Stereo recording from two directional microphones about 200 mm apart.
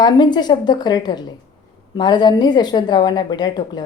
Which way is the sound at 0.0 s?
20° left (ahead or behind).